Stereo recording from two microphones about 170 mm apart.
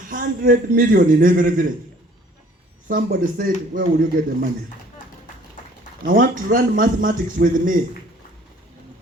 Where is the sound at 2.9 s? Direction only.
55° right (ahead or behind).